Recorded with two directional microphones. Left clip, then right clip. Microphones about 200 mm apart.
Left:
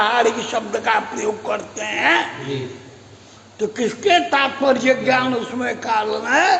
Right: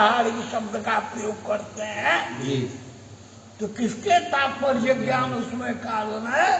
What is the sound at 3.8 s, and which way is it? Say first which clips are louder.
Speech: left 4 dB; 50° left (ahead or behind).